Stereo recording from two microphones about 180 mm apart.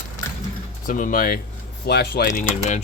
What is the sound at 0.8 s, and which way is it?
Speech, 45° left (ahead or behind).